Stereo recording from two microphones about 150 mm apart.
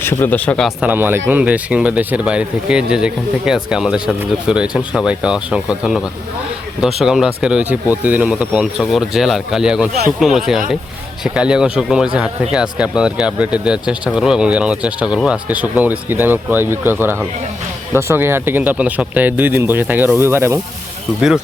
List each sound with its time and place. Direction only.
0.0 s speech: 15° left (ahead or behind)
0.8 s speech: 10° right (ahead or behind)
21.2 s speech: 5° right (ahead or behind)